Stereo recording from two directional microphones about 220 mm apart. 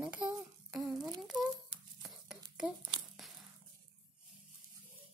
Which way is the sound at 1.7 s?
25° right (ahead or behind).